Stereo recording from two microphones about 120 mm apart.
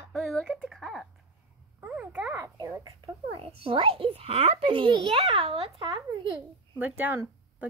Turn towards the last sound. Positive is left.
turn(degrees=-15)  # may be behind; listen again after turning